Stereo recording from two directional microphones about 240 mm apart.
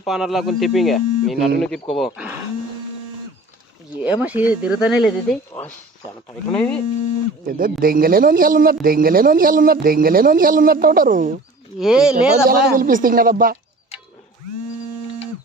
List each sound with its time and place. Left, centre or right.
0.0 s speech: centre
3.9 s speech: centre
7.4 s speech: right
11.8 s speech: centre
12.5 s speech: right